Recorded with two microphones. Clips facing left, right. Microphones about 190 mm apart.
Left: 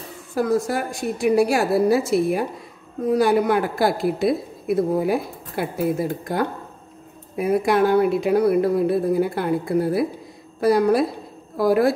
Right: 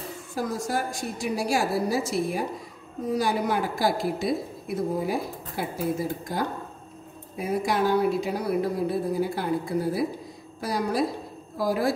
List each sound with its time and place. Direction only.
0.3 s a woman's voice: 60° left (ahead or behind)